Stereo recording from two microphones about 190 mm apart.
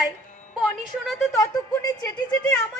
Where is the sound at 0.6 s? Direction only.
Centre (ahead or behind).